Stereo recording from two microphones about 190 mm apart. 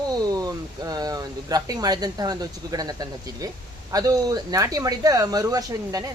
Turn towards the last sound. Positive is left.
turn(degrees=-20)  # may be behind; listen again after turning